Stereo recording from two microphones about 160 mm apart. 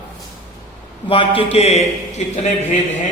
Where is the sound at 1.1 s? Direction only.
35° left (ahead or behind).